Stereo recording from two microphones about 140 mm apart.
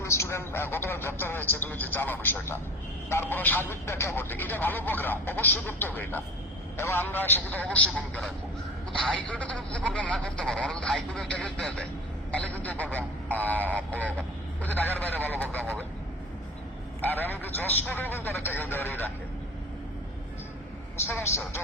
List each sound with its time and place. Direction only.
0.0 s speech: 20° left (ahead or behind)
13.6 s a sound: 15° right (ahead or behind)
13.9 s vehicle: 10° left (ahead or behind)
15.0 s speech: 15° left (ahead or behind)
17.0 s speech: 15° left (ahead or behind)
21.1 s speech: 15° left (ahead or behind)